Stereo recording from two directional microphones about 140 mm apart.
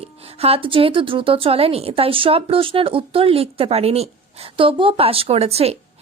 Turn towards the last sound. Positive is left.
turn(degrees=-45)  # may be behind; listen again after turning